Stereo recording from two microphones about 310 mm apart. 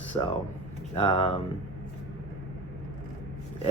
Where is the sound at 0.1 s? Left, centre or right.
Centre.